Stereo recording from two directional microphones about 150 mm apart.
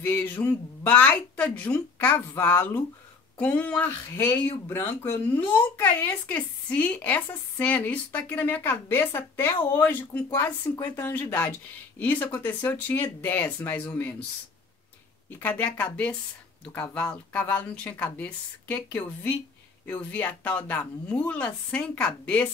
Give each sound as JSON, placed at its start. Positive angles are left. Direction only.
{"t": 0.0, "sound": "speech", "side_deg": 10}
{"t": 15.2, "sound": "speech", "side_deg": 10}